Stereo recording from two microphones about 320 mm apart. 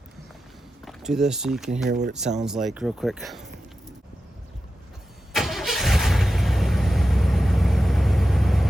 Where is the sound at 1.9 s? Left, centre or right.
Right.